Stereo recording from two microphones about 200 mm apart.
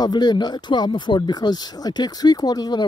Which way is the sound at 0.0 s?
20° left (ahead or behind).